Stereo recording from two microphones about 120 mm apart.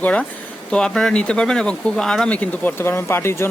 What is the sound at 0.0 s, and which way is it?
Speech, 10° left (ahead or behind).